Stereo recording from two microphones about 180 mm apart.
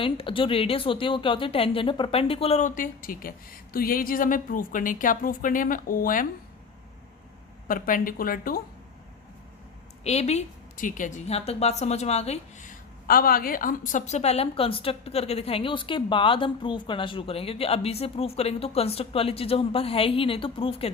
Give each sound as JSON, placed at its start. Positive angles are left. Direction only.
{"t": 0.0, "sound": "speech", "side_deg": 30}
{"t": 7.7, "sound": "speech", "side_deg": 50}
{"t": 10.0, "sound": "a woman's voice", "side_deg": 35}